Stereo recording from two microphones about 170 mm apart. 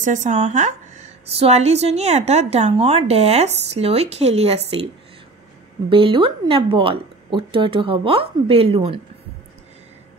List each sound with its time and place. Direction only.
0.0 s a woman's voice: 45° right (ahead or behind)
5.9 s a woman's voice: 30° right (ahead or behind)